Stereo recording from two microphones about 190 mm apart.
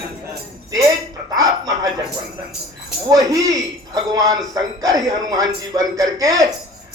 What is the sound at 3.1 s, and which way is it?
A man's voice, 20° right (ahead or behind).